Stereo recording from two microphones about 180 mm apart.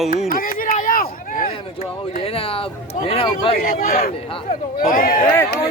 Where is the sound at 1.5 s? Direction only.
35° left (ahead or behind).